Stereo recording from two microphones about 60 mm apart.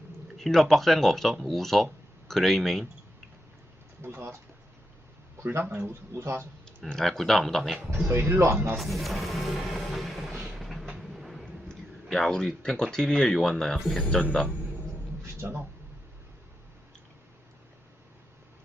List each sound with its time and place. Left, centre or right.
0.3 s speech: centre
4.0 s speech: right
5.4 s speech: right
6.7 s speech: centre
8.1 s speech: right
8.8 s music: centre
11.0 s a sound: centre
11.7 s speech: centre